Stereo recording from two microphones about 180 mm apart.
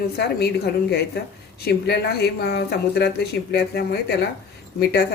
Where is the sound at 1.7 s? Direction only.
65° left (ahead or behind).